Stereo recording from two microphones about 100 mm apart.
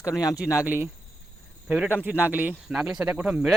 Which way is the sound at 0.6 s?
15° right (ahead or behind).